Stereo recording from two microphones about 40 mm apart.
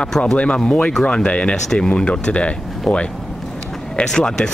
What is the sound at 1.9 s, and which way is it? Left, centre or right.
Speech, left.